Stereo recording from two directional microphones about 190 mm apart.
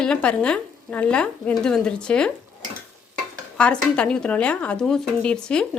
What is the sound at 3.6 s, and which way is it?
Speech, 5° left (ahead or behind).